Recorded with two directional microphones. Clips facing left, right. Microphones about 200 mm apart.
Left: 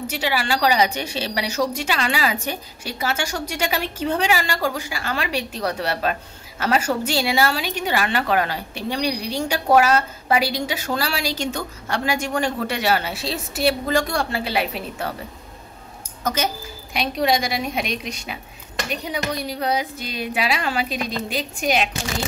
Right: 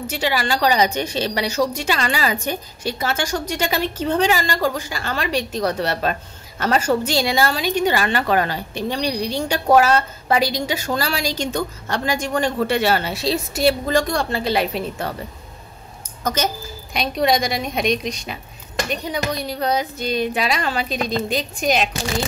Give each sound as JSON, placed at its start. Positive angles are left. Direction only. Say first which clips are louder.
{"t": 0.2, "sound": "a woman's voice", "louder": "right 2 dB", "side_deg": 5}
{"t": 13.1, "sound": "a woman's voice", "louder": "right 6 dB", "side_deg": -40}
{"t": 13.6, "sound": "a woman's voice", "louder": "right 1 dB", "side_deg": 5}
{"t": 16.9, "sound": "a woman's voice", "louder": "right 2 dB", "side_deg": 5}